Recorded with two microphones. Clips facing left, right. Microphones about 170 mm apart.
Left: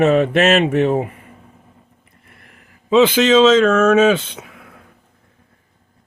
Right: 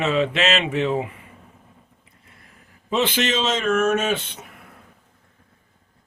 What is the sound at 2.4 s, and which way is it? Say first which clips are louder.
Speech: left 3 dB; 80° left.